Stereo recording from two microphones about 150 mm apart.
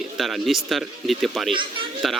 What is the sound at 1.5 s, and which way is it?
Speech, 35° right (ahead or behind).